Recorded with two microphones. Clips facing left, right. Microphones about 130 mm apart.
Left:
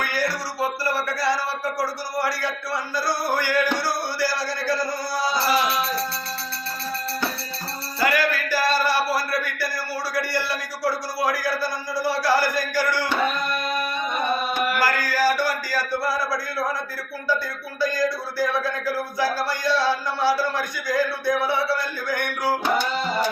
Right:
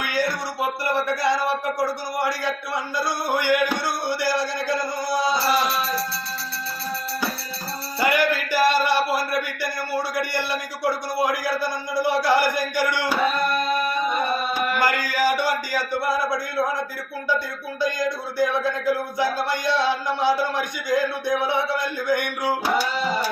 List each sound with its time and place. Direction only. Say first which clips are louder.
0.6 s a man's voice: right 1 dB; 20° right (ahead or behind)
5.3 s music: even; centre (ahead or behind)
7.9 s music: right 1 dB; 20° right (ahead or behind)
14.8 s speech: right 1 dB; 20° right (ahead or behind)
17.7 s a man's voice: left 1 dB; 20° right (ahead or behind)
22.6 s tabla: even; 10° right (ahead or behind)